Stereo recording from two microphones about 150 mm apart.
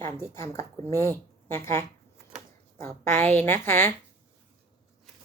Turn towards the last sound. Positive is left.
turn(degrees=15)  # may be behind; listen again after turning